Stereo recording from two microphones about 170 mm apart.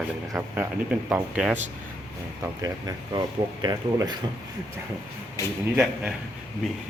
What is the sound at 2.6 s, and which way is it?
Speech, 20° right (ahead or behind).